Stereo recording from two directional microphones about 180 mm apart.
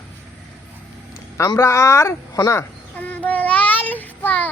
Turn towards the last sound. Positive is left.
turn(degrees=10)  # may be behind; listen again after turning